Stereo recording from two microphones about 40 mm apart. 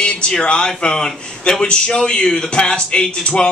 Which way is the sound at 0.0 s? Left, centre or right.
Left.